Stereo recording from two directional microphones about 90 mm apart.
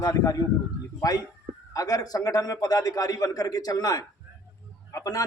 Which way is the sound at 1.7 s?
45° left (ahead or behind).